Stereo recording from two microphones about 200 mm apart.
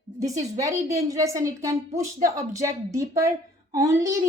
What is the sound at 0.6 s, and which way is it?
A woman's voice, 15° right (ahead or behind).